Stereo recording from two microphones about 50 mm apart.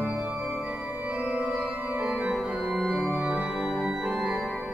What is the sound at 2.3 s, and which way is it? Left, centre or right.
Organ, centre.